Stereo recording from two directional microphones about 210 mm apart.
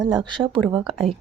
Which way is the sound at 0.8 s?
Centre (ahead or behind).